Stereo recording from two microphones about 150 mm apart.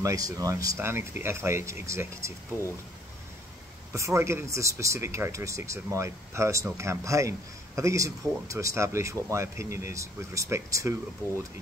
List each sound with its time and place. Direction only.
0.0 s a man's voice: 25° right (ahead or behind)
3.9 s a man's voice: 20° right (ahead or behind)